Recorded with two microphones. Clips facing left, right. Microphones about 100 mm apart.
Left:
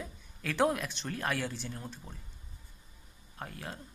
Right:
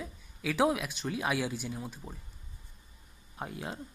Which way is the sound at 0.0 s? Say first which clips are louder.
Right 3 dB; 5° right (ahead or behind).